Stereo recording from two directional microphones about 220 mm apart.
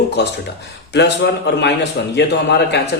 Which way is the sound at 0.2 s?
50° left (ahead or behind).